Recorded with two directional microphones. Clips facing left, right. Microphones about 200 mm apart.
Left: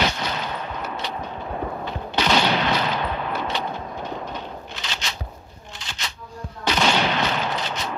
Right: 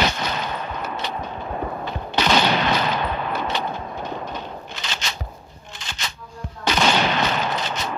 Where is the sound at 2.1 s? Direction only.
45° right (ahead or behind).